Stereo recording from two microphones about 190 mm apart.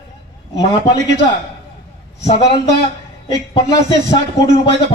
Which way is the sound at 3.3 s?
20° left (ahead or behind).